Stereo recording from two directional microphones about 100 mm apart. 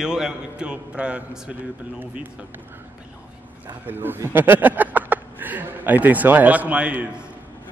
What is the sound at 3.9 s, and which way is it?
Speech, 20° right (ahead or behind).